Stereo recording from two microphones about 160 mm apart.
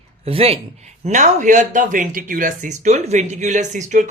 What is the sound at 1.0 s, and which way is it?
Speech, 50° right (ahead or behind).